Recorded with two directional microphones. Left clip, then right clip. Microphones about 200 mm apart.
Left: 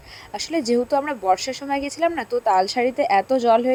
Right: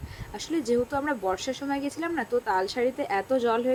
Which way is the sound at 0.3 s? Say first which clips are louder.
Left 5 dB; 35° left (ahead or behind).